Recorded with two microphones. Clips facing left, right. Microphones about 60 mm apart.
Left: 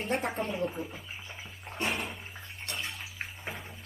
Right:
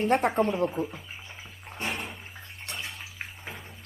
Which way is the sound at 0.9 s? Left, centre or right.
Centre.